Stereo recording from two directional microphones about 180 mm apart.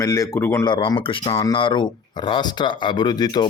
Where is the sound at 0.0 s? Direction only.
20° left (ahead or behind).